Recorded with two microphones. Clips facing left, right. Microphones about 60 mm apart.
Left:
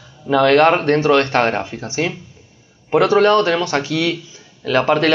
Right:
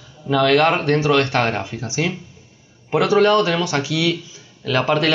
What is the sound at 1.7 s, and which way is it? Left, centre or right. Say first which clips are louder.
Speech: left 1 dB; centre.